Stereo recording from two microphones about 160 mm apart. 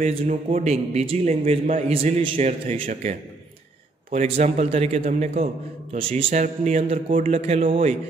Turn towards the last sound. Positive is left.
turn(degrees=-35)  # may be behind; listen again after turning